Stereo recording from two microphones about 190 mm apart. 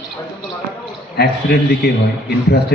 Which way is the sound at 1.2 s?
55° left (ahead or behind).